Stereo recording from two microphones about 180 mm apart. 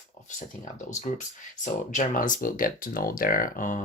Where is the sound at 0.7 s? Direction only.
40° left (ahead or behind).